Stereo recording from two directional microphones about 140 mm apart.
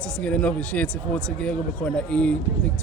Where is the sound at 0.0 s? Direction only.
10° left (ahead or behind).